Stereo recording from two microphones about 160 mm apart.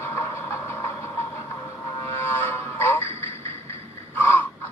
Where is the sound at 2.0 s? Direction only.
15° left (ahead or behind).